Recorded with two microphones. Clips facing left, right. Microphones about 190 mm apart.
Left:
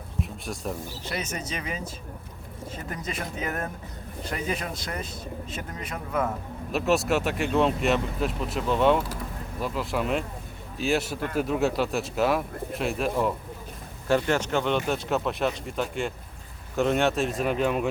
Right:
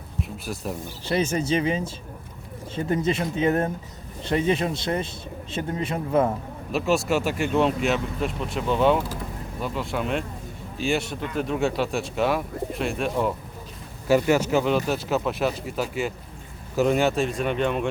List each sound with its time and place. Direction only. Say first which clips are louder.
0.2 s speech: right 2 dB; centre (ahead or behind)
1.0 s speech: right 11 dB; 30° right (ahead or behind)
6.7 s speech: right 1 dB; centre (ahead or behind)